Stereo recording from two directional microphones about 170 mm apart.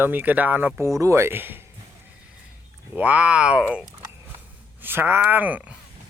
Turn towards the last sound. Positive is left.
turn(degrees=-10)  # may be behind; listen again after turning